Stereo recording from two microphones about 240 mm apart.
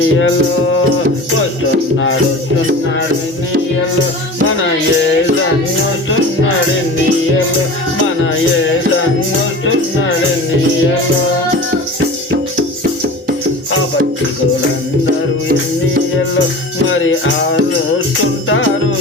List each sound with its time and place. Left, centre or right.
0.0 s music: left
4.4 s music: left
16.9 s music: left